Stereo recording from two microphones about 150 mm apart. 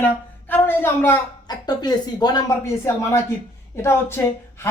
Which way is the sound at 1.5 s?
25° left (ahead or behind).